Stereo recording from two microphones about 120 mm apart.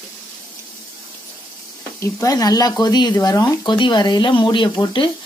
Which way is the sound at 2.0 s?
30° left (ahead or behind).